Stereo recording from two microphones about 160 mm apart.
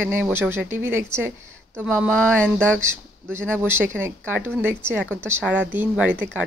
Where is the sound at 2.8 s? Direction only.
15° right (ahead or behind).